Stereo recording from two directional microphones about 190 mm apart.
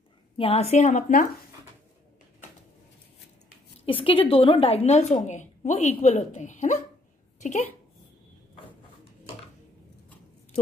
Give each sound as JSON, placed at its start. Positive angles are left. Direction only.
{"t": 0.4, "sound": "a woman's voice", "side_deg": 35}
{"t": 3.8, "sound": "a woman's voice", "side_deg": 30}